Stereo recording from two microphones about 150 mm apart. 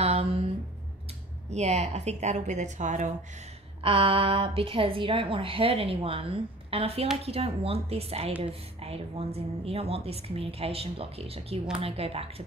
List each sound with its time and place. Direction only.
0.0 s a sound: 40° right (ahead or behind)
1.5 s a woman's voice: 45° right (ahead or behind)
3.8 s a woman's voice: 40° right (ahead or behind)